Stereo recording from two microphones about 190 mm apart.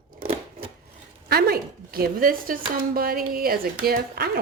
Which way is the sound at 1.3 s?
50° right (ahead or behind).